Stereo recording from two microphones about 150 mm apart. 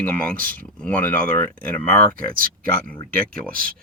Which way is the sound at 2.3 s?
70° right (ahead or behind).